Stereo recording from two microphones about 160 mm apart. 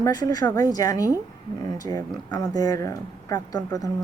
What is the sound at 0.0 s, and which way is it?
Speech, 25° left (ahead or behind).